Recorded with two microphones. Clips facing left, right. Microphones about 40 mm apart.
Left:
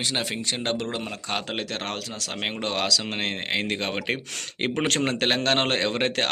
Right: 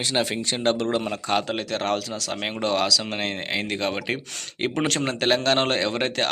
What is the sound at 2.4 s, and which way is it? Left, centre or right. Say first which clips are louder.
A man's voice: right 3 dB; left.